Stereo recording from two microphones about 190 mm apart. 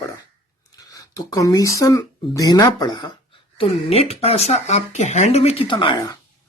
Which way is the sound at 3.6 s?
30° left (ahead or behind).